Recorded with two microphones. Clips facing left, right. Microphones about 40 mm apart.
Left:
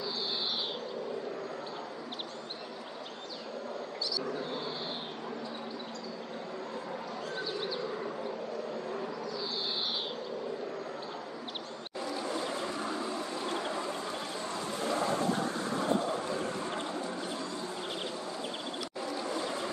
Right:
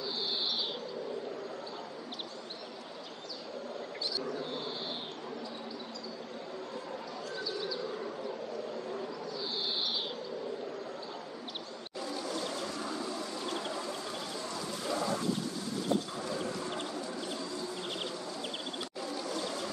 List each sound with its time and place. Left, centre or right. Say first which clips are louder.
12.3 s a sound: left 2 dB; left
14.5 s train: left 3 dB; left
19.2 s ratchet: left 2 dB; left